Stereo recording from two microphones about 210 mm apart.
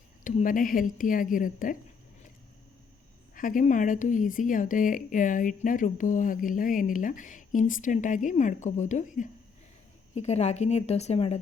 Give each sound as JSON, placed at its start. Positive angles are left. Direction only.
{"t": 0.3, "sound": "a woman's voice", "side_deg": 40}
{"t": 3.3, "sound": "a woman's voice", "side_deg": 40}